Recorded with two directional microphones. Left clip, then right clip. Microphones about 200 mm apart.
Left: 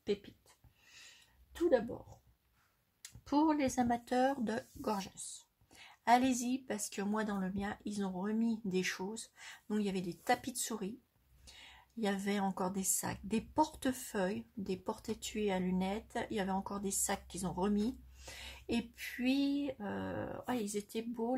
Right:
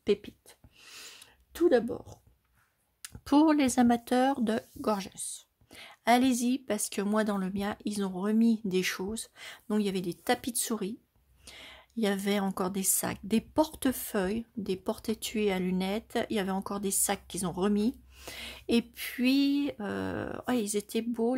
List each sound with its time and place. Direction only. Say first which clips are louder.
0.0 s speech: right 9 dB; 40° right (ahead or behind)
0.8 s a sound: right 9 dB; 55° right (ahead or behind)
1.7 s speech: right 5 dB; 50° right (ahead or behind)